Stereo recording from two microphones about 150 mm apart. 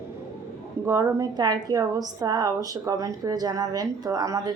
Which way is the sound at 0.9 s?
15° right (ahead or behind).